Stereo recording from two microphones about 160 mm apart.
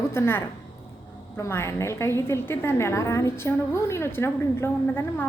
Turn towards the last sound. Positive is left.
turn(degrees=15)  # may be behind; listen again after turning